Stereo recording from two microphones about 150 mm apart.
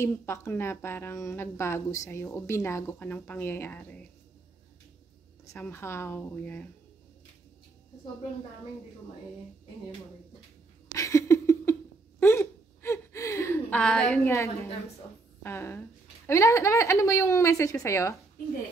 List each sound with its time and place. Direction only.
0.0 s a woman's voice: 20° left (ahead or behind)
5.5 s a woman's voice: 15° left (ahead or behind)
10.9 s a sound: 20° left (ahead or behind)
12.2 s gasp: 15° left (ahead or behind)
13.7 s a woman's voice: 5° left (ahead or behind)
14.2 s a woman's voice: 20° left (ahead or behind)